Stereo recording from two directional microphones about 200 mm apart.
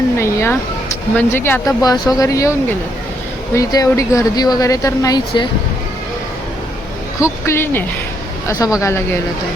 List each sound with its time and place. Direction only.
0.2 s speech: 15° left (ahead or behind)
7.2 s speech: 15° left (ahead or behind)